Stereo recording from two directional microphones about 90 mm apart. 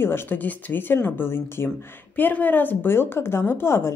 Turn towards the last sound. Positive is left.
turn(degrees=30)  # may be behind; listen again after turning